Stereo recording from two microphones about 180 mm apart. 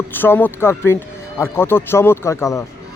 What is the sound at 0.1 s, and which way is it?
Speech, 10° left (ahead or behind).